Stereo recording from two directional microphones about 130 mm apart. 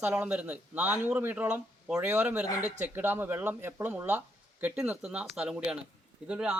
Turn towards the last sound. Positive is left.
turn(degrees=-5)  # may be behind; listen again after turning